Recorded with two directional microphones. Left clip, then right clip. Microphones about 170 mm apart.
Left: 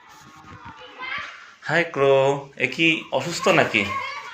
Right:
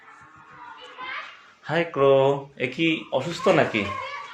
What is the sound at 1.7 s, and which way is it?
Speech, 5° right (ahead or behind).